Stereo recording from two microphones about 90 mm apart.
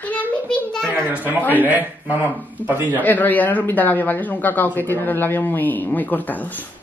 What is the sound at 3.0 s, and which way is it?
Speech, 20° left (ahead or behind).